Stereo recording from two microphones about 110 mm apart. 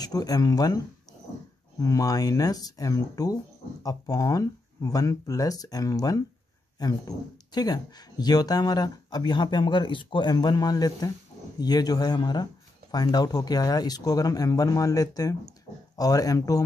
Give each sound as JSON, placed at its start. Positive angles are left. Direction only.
{"t": 0.0, "sound": "speech", "side_deg": 35}
{"t": 1.8, "sound": "speech", "side_deg": 30}